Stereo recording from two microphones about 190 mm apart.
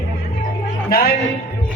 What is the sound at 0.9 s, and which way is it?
Music, 55° left (ahead or behind).